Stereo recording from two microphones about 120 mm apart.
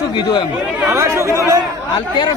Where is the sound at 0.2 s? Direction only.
35° left (ahead or behind).